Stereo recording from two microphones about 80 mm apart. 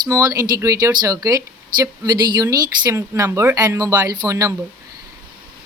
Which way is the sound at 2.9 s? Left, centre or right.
Right.